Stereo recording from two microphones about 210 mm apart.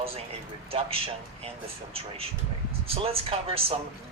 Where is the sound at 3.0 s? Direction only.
25° right (ahead or behind).